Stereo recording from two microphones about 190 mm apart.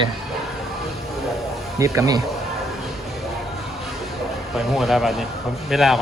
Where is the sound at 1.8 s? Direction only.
15° right (ahead or behind).